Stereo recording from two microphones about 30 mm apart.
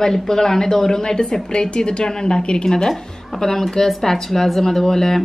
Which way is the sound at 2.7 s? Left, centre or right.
Centre.